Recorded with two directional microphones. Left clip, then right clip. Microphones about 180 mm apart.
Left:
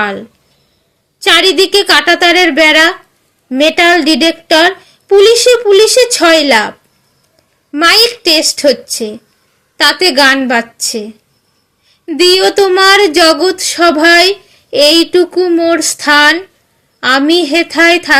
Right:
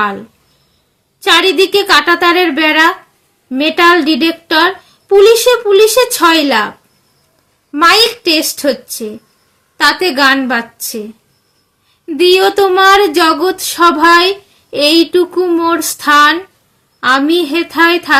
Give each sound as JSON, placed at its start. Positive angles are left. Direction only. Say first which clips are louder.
{"t": 0.0, "sound": "speech", "louder": "even", "side_deg": 15}
{"t": 12.0, "sound": "speech", "louder": "left 1 dB", "side_deg": 15}